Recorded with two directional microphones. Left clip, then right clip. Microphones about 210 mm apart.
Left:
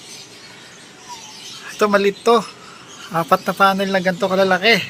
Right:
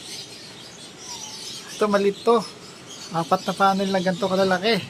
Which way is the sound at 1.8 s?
10° left (ahead or behind).